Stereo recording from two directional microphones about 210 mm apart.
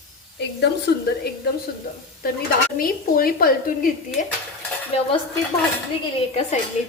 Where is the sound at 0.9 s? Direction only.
50° left (ahead or behind).